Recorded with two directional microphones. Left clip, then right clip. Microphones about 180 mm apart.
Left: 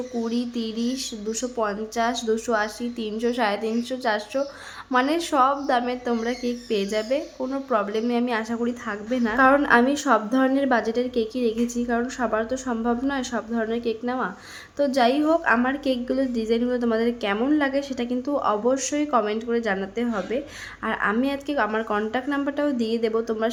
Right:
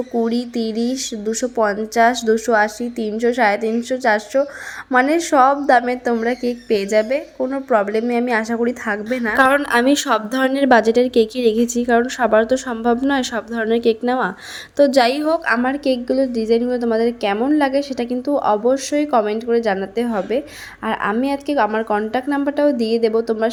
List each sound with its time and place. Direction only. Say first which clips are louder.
0.3 s a woman's voice: right 7 dB; 30° right (ahead or behind)
9.6 s a woman's voice: right 3 dB; 40° right (ahead or behind); by 23.5 s 20° right (ahead or behind)